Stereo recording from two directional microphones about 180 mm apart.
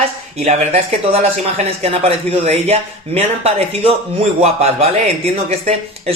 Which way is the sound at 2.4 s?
35° right (ahead or behind).